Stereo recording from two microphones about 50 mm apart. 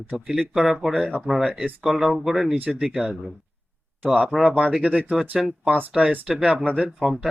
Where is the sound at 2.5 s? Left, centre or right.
Right.